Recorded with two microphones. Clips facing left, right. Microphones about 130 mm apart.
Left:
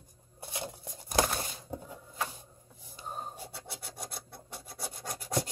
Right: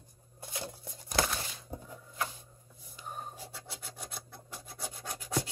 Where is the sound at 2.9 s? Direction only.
30° left (ahead or behind).